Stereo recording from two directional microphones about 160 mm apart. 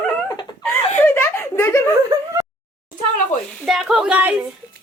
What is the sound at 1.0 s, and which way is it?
Giggle, 15° left (ahead or behind).